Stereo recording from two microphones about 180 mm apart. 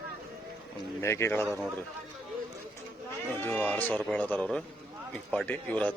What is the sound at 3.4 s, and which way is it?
A man's voice, 10° left (ahead or behind).